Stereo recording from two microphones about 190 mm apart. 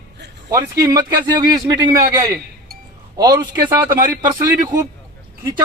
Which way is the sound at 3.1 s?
20° right (ahead or behind).